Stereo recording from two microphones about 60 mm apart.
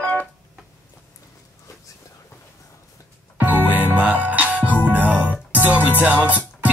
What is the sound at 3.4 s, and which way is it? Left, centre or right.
Music, right.